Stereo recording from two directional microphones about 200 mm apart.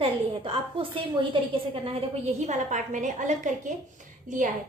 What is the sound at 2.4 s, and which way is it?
A woman's voice, 35° right (ahead or behind).